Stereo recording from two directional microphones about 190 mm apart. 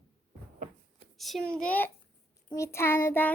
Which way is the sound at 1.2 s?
Centre (ahead or behind).